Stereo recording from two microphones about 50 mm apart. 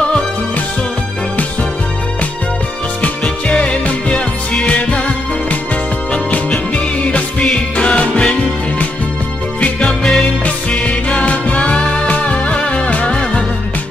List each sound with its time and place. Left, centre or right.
3.0 s music: left
7.1 s music: left
9.8 s music: centre
10.4 s music: left